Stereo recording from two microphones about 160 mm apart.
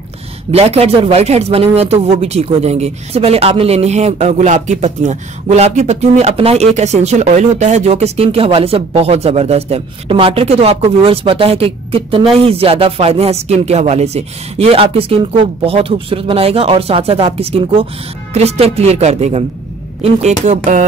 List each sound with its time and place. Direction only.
0.5 s speech: 40° right (ahead or behind)